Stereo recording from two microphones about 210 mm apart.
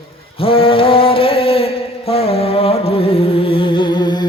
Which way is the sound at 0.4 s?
25° left (ahead or behind).